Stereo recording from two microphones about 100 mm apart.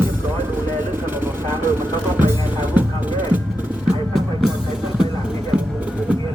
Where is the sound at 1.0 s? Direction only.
20° right (ahead or behind).